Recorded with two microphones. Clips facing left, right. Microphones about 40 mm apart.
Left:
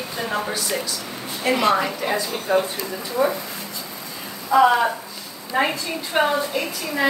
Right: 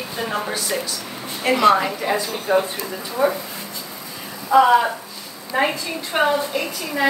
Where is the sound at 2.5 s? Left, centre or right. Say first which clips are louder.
Right 1 dB; centre.